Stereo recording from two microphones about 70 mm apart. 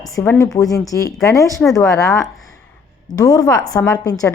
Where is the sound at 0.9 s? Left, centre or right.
Left.